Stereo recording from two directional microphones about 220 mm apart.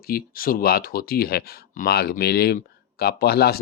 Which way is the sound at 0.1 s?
40° left (ahead or behind).